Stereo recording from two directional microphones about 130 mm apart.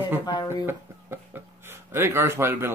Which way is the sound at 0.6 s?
15° right (ahead or behind).